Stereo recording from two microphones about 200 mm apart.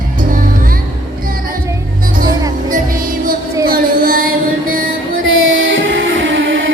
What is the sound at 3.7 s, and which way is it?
Music, 45° right (ahead or behind).